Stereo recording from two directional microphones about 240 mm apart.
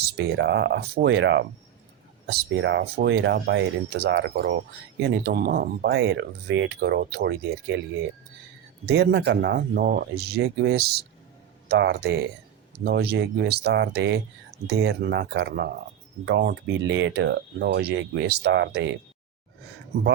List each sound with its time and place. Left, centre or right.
0.2 s speech: right
8.9 s speech: right